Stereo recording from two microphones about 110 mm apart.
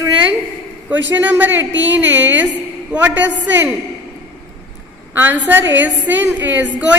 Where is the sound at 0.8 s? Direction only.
15° right (ahead or behind).